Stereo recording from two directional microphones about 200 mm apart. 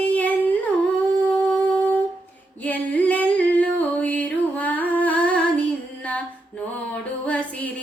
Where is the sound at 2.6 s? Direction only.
10° left (ahead or behind).